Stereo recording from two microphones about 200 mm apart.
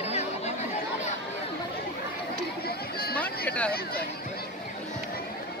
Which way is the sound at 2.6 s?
50° left (ahead or behind).